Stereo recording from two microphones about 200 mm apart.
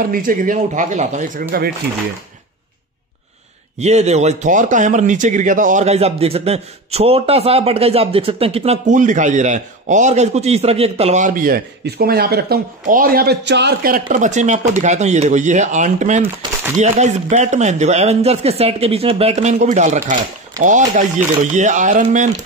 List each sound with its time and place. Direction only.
0.0 s speech: 45° right (ahead or behind)
3.8 s speech: 35° right (ahead or behind)